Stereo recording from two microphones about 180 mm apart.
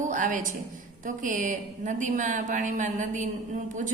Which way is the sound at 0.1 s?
45° right (ahead or behind).